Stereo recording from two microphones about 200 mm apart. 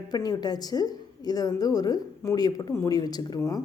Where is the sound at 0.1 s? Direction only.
20° left (ahead or behind).